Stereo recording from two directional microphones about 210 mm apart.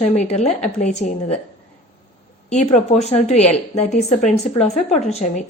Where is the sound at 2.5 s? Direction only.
30° left (ahead or behind).